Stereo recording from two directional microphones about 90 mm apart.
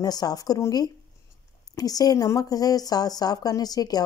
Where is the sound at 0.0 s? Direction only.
45° left (ahead or behind).